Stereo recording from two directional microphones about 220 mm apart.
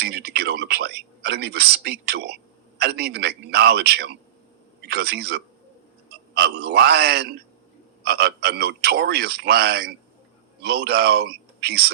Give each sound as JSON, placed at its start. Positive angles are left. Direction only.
{"t": 0.0, "sound": "a man's voice", "side_deg": -50}